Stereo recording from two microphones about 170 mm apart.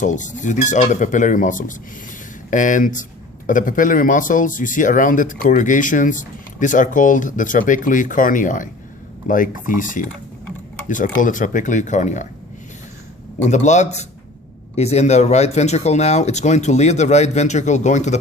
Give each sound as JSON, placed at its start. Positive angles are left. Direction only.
{"t": 0.0, "sound": "speech", "side_deg": 45}
{"t": 13.4, "sound": "speech", "side_deg": 45}